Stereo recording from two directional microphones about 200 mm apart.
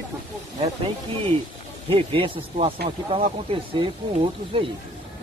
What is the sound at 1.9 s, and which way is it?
Speech, 25° right (ahead or behind).